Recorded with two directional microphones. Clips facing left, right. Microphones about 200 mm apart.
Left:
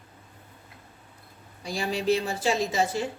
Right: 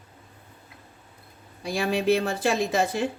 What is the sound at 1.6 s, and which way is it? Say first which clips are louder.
Speech: right 3 dB; 60° right (ahead or behind).